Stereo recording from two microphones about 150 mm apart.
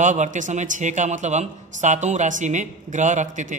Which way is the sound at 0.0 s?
55° right (ahead or behind).